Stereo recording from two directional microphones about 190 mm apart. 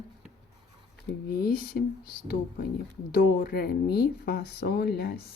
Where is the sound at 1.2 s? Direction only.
50° left (ahead or behind).